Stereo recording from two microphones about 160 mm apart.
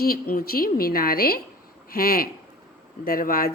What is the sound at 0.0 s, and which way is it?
Speech, 70° left (ahead or behind).